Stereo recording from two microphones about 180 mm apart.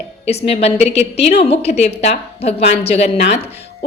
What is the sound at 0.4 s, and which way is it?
A woman's voice, 35° left (ahead or behind).